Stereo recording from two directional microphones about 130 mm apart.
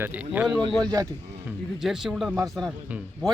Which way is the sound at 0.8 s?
30° right (ahead or behind).